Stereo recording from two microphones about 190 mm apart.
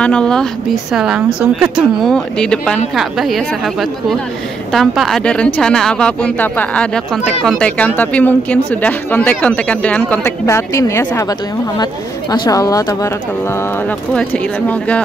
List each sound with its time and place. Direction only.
0.0 s a woman's voice: 5° left (ahead or behind)